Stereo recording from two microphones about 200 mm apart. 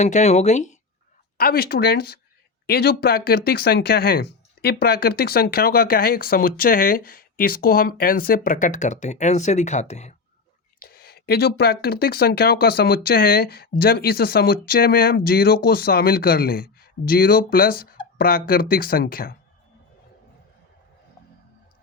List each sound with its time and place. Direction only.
0.0 s speech: 35° left (ahead or behind)
1.4 s speech: 50° left (ahead or behind)
10.8 s speech: 50° left (ahead or behind)